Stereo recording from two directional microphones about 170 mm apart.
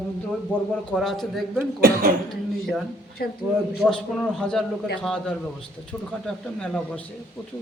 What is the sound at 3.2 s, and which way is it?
Speech, 65° left (ahead or behind).